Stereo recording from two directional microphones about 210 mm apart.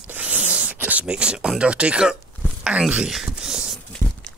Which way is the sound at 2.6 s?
5° right (ahead or behind).